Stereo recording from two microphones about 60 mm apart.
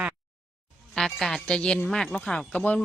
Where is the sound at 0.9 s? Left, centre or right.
Centre.